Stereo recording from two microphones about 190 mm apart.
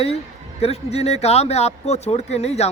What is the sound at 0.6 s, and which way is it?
Speech, 35° left (ahead or behind).